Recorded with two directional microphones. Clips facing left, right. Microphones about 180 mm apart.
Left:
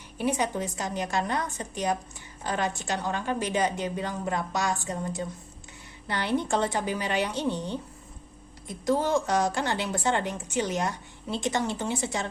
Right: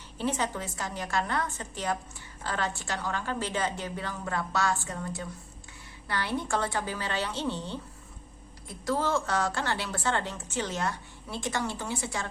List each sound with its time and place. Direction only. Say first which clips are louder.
0.2 s a woman's voice: left 3 dB; 15° left (ahead or behind)